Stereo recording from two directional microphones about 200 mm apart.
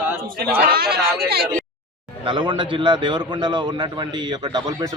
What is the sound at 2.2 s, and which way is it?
Speech, 25° right (ahead or behind).